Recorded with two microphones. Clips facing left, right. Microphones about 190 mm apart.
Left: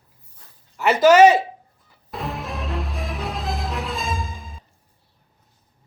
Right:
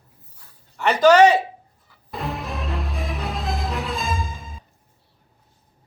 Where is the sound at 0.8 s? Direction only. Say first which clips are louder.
Left 1 dB; 5° left (ahead or behind).